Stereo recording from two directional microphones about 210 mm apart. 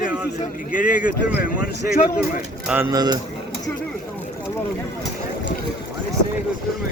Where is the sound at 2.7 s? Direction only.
15° right (ahead or behind).